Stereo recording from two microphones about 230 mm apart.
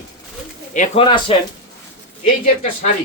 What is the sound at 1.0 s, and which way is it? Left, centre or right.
Speech, centre.